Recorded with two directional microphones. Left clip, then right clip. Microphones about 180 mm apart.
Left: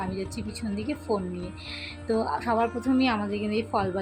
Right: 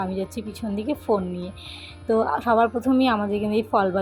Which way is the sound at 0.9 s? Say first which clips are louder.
Right 6 dB; 20° right (ahead or behind).